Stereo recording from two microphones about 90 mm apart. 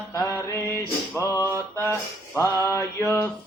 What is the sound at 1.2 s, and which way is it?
Music, 35° left (ahead or behind).